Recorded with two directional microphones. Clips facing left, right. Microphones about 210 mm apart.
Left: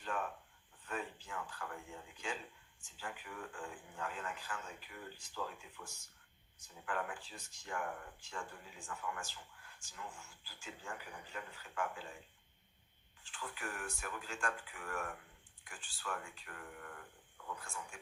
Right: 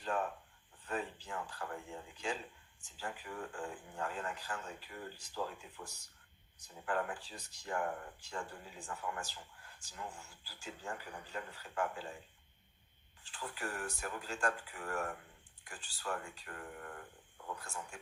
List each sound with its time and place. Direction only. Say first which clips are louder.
0.0 s a sound: right 4 dB; 35° right (ahead or behind)
2.8 s speech: right 3 dB; 35° right (ahead or behind)
13.2 s speech: right 3 dB; 40° right (ahead or behind)